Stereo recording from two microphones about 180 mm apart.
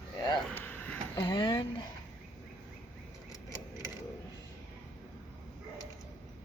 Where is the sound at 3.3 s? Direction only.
20° left (ahead or behind).